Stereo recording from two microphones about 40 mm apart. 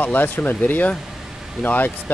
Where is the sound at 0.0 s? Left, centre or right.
Left.